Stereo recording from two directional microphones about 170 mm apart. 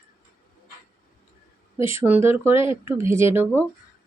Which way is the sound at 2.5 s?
30° left (ahead or behind).